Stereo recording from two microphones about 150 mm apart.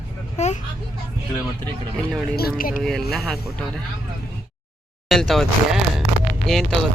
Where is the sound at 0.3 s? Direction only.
50° left (ahead or behind).